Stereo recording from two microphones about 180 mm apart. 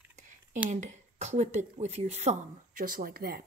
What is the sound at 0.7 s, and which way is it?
Speech, 40° right (ahead or behind).